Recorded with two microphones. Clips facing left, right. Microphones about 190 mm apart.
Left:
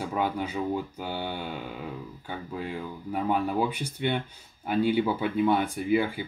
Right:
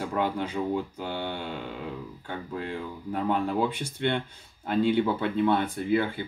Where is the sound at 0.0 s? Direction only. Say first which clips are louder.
Right 1 dB; 5° left (ahead or behind).